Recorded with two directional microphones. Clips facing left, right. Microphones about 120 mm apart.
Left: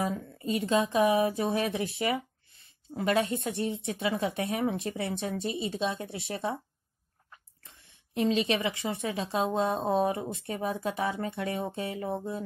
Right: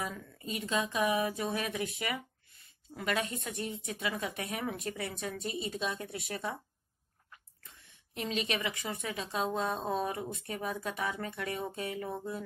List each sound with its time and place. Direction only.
0.0 s speech: 35° left (ahead or behind)
8.1 s speech: 30° left (ahead or behind)